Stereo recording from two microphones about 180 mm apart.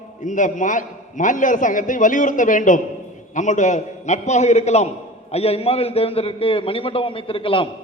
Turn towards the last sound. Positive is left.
turn(degrees=30)  # may be behind; listen again after turning